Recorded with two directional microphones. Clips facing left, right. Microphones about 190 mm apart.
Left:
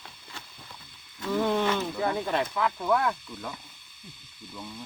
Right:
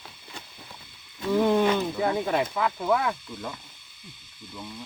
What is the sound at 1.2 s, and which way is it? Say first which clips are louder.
Speech: right 4 dB; 15° right (ahead or behind).